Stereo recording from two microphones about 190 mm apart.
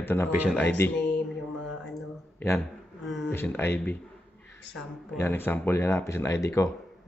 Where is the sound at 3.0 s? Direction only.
Centre (ahead or behind).